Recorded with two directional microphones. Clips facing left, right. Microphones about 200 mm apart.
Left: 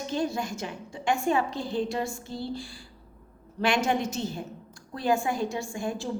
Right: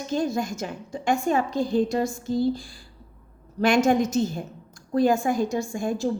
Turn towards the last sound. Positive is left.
turn(degrees=-45)  # may be behind; listen again after turning